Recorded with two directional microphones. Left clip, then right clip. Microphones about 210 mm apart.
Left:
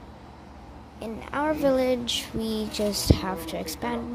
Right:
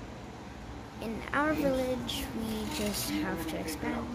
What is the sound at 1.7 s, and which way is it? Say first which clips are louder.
Speech: left 8 dB; 40° left (ahead or behind).